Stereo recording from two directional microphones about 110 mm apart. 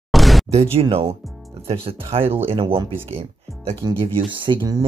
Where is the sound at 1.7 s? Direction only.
60° right (ahead or behind).